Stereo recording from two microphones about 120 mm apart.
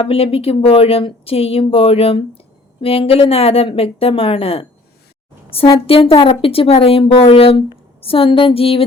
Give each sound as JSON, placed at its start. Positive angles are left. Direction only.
{"t": 0.0, "sound": "speech", "side_deg": 50}
{"t": 5.8, "sound": "speech", "side_deg": 50}